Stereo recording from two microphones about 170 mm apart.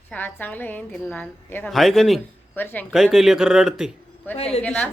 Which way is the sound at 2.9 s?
5° right (ahead or behind).